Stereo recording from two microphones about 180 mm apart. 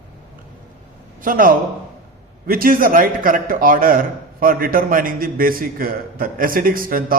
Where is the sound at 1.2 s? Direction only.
50° right (ahead or behind).